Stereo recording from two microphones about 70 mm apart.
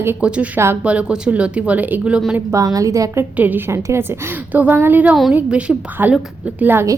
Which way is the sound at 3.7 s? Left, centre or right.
Right.